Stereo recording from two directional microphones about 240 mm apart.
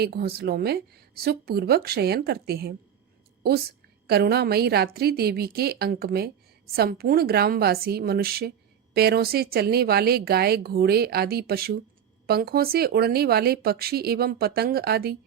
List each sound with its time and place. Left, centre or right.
0.0 s a woman's voice: right
4.0 s a woman's voice: right